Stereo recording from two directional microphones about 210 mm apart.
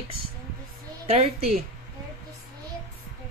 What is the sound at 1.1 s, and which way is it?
Speech, 30° right (ahead or behind).